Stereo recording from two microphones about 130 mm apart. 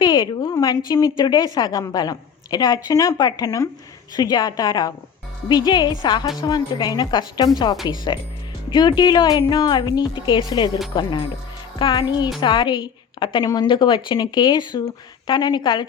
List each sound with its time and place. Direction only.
0.0 s a woman's voice: 35° left (ahead or behind)